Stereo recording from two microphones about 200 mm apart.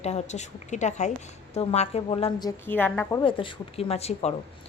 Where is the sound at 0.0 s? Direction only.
35° left (ahead or behind).